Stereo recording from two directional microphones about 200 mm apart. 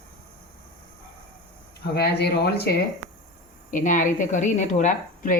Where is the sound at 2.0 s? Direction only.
55° left (ahead or behind).